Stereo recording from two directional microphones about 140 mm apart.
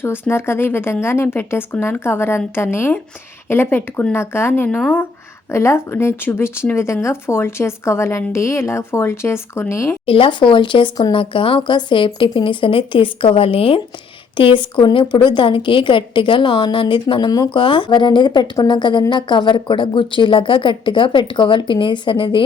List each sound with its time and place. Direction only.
0.0 s a woman's voice: 15° left (ahead or behind)
5.5 s speech: 20° left (ahead or behind)
10.1 s a woman's voice: 40° left (ahead or behind)